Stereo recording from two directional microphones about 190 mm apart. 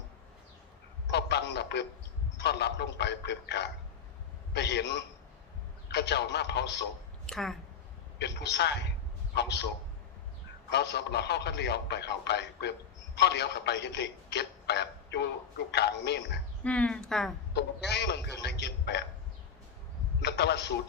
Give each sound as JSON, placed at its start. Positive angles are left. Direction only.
{"t": 1.0, "sound": "a man's voice", "side_deg": 65}
{"t": 7.3, "sound": "speech", "side_deg": 0}
{"t": 8.2, "sound": "a man's voice", "side_deg": 65}
{"t": 10.7, "sound": "a man's voice", "side_deg": 60}
{"t": 16.6, "sound": "speech", "side_deg": 5}
{"t": 17.5, "sound": "a man's voice", "side_deg": 60}
{"t": 20.2, "sound": "a man's voice", "side_deg": 65}